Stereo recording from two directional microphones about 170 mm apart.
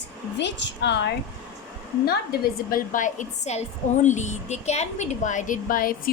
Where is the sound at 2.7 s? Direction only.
55° left (ahead or behind).